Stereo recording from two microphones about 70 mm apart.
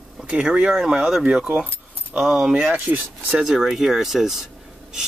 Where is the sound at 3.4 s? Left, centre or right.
Centre.